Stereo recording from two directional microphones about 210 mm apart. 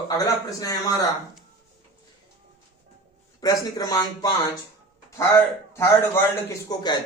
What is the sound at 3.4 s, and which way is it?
Speech, 15° left (ahead or behind).